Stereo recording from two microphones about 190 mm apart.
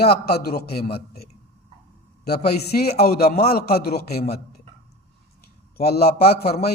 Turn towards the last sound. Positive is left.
turn(degrees=55)  # may be behind; listen again after turning